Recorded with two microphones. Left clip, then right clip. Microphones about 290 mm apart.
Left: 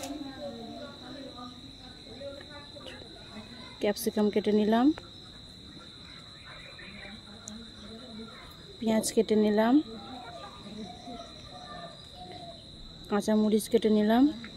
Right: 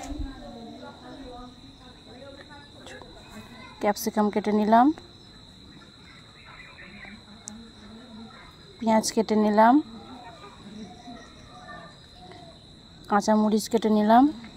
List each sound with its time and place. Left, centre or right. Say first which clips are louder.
3.8 s a woman's voice: right 4 dB; centre
8.8 s speech: right 4 dB; centre
13.1 s speech: right 5 dB; centre